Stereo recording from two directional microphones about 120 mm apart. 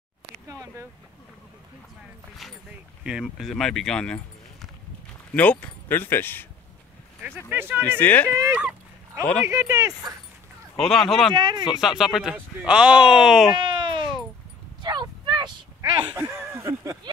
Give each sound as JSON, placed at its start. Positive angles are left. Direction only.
{"t": 0.5, "sound": "a sound", "side_deg": -20}
{"t": 3.0, "sound": "speech", "side_deg": -5}
{"t": 7.2, "sound": "speech", "side_deg": -15}
{"t": 8.0, "sound": "speech", "side_deg": 15}
{"t": 8.4, "sound": "speech", "side_deg": -20}
{"t": 10.8, "sound": "speech", "side_deg": 0}
{"t": 11.3, "sound": "speech", "side_deg": -40}
{"t": 11.8, "sound": "speech", "side_deg": -5}
{"t": 13.6, "sound": "bleat", "side_deg": -45}
{"t": 14.8, "sound": "a sound", "side_deg": -35}
{"t": 15.8, "sound": "speech", "side_deg": -20}